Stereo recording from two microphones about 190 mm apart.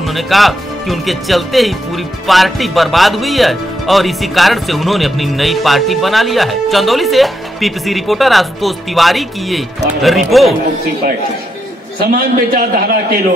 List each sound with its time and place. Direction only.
0.0 s speech: centre (ahead or behind)
12.0 s a man's voice: 55° right (ahead or behind)